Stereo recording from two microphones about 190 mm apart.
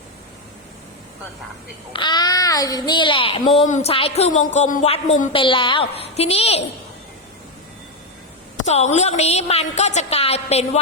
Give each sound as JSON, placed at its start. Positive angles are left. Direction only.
{"t": 1.9, "sound": "a child's voice", "side_deg": 25}
{"t": 8.5, "sound": "a woman's voice", "side_deg": 35}